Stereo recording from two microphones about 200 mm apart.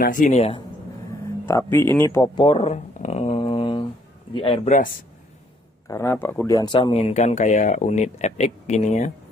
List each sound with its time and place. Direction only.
0.0 s speech: 40° left (ahead or behind)
1.4 s speech: 10° left (ahead or behind)
2.0 s a sound: 15° left (ahead or behind)
4.3 s speech: 25° left (ahead or behind)
5.9 s speech: 15° left (ahead or behind); by 9.1 s 35° left (ahead or behind)